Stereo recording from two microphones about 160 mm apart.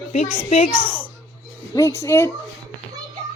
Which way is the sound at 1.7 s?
20° left (ahead or behind).